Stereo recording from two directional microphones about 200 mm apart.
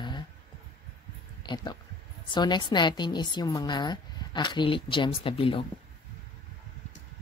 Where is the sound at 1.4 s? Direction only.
20° left (ahead or behind).